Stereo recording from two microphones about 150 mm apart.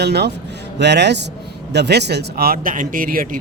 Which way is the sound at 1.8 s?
90° right.